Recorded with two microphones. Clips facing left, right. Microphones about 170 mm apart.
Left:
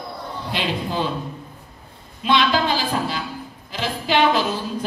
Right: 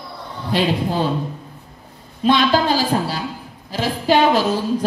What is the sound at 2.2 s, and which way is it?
A woman's voice, 40° right (ahead or behind).